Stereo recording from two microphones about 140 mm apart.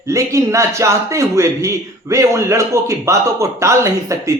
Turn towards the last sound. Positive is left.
turn(degrees=-20)  # may be behind; listen again after turning